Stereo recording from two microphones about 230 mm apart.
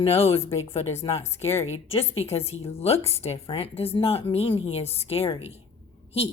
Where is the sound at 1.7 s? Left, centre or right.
Left.